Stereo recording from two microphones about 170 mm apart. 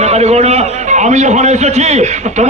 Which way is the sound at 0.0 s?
40° right (ahead or behind).